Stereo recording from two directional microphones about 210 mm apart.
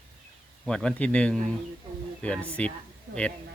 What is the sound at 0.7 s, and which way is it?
Speech, 5° left (ahead or behind).